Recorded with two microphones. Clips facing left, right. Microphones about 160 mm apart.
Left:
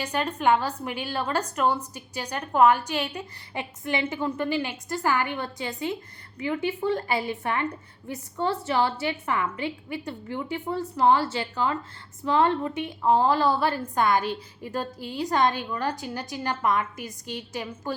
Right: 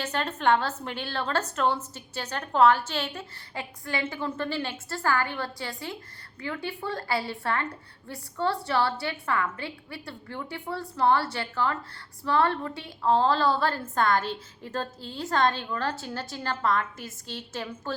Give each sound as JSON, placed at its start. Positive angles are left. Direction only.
{"t": 0.0, "sound": "a woman's voice", "side_deg": 10}